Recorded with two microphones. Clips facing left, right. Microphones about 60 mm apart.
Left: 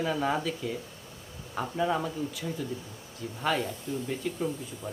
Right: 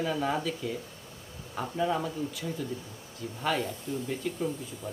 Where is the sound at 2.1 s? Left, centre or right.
Centre.